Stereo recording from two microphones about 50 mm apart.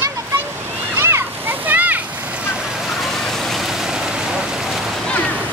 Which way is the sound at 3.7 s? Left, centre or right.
Centre.